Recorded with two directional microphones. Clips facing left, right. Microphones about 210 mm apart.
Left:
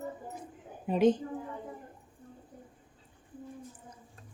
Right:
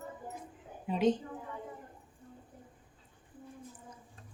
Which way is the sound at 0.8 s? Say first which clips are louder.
Left 5 dB; 50° left (ahead or behind).